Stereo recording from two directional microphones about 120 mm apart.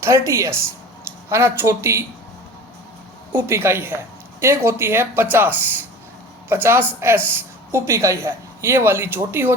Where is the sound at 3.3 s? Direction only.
20° right (ahead or behind).